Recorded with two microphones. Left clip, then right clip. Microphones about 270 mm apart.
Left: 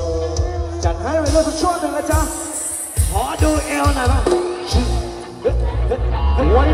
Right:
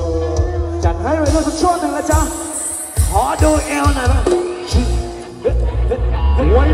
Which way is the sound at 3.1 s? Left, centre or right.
Centre.